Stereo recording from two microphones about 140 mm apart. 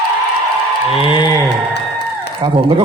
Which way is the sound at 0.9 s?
35° left (ahead or behind).